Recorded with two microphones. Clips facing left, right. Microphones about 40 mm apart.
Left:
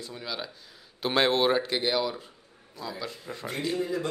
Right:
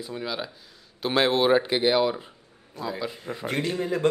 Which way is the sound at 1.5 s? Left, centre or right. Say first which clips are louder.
Right 6 dB; centre.